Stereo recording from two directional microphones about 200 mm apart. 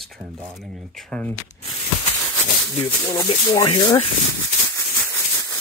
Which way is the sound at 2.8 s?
15° left (ahead or behind).